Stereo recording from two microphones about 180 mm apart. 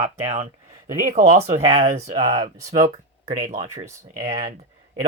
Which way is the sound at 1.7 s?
35° right (ahead or behind).